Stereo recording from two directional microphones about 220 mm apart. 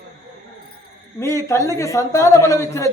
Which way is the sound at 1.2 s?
15° left (ahead or behind).